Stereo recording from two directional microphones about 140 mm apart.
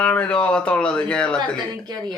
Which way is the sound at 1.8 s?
30° right (ahead or behind).